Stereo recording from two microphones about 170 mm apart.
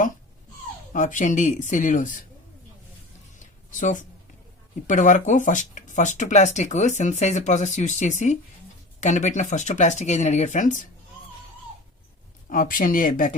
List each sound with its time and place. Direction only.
0.9 s speech: 50° left (ahead or behind)
3.3 s a sound: 50° left (ahead or behind)
4.9 s speech: 50° left (ahead or behind)
12.5 s speech: 55° left (ahead or behind)